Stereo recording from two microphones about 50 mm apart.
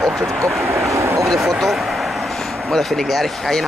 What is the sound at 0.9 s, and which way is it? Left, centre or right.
Vehicle, right.